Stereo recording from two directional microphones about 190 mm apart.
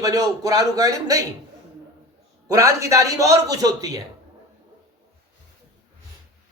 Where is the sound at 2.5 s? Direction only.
15° right (ahead or behind).